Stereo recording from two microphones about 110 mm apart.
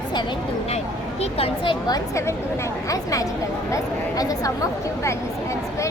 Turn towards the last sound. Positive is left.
turn(degrees=35)  # may be behind; listen again after turning